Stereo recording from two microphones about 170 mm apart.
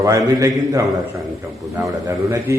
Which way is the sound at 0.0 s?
20° right (ahead or behind).